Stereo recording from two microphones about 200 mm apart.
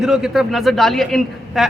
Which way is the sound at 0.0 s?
Centre (ahead or behind).